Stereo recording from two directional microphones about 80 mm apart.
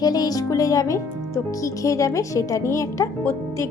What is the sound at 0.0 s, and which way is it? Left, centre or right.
A woman's voice, left.